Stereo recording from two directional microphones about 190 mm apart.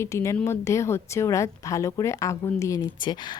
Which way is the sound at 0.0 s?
15° left (ahead or behind).